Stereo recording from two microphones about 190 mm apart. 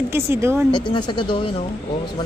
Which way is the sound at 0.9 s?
25° left (ahead or behind).